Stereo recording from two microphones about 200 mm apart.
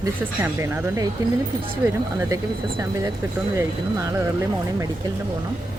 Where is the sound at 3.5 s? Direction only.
15° right (ahead or behind).